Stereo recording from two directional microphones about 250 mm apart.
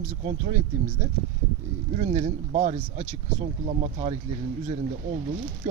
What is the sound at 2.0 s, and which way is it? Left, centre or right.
Speech, right.